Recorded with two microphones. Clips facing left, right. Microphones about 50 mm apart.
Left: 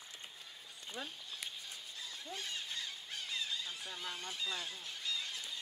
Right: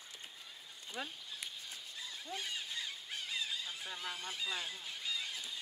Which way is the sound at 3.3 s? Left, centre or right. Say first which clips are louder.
Even; centre.